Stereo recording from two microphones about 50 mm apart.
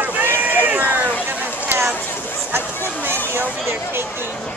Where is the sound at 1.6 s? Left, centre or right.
Right.